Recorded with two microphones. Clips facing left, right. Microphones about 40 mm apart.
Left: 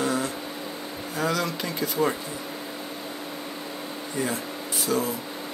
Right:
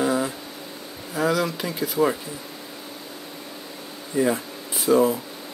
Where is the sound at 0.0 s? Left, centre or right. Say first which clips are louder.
Right 3 dB; centre.